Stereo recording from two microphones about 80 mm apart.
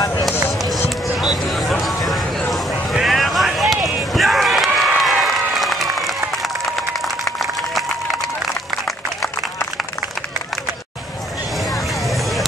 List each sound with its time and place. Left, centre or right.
0.3 s music: left
0.8 s a sound: centre
4.1 s run: centre
4.7 s applause: centre
11.7 s music: centre